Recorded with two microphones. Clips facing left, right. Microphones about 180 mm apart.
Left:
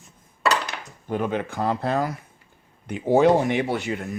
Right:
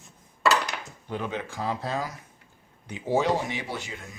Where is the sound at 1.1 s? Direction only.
50° left (ahead or behind).